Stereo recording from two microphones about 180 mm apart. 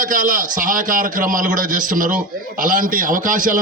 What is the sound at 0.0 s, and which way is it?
A man's voice, 50° right (ahead or behind).